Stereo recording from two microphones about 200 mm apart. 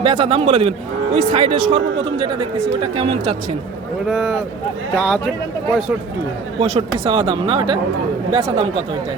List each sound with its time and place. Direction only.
0.0 s speech: 30° right (ahead or behind)
4.1 s speech: centre (ahead or behind)
6.6 s speech: 30° right (ahead or behind)